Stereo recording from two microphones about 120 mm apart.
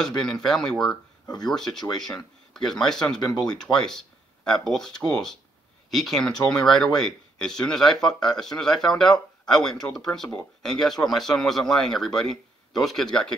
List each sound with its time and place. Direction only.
0.0 s speech: 5° left (ahead or behind)
1.2 s speech: 35° left (ahead or behind)
1.5 s speech: 5° left (ahead or behind)